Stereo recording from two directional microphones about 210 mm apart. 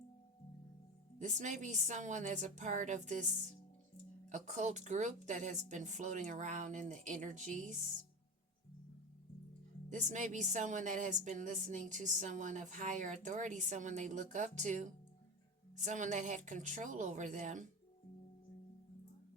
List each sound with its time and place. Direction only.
1.2 s a woman's voice: 35° right (ahead or behind)
4.3 s a woman's voice: 35° right (ahead or behind)
9.9 s a woman's voice: 35° right (ahead or behind)